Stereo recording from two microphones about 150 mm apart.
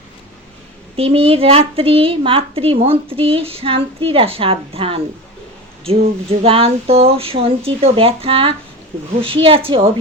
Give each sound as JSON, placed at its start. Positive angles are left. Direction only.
{"t": 0.9, "sound": "a child's voice", "side_deg": -40}
{"t": 6.4, "sound": "a child's voice", "side_deg": -40}